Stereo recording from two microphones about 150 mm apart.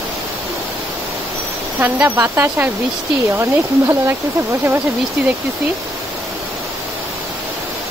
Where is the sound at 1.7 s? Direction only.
10° right (ahead or behind).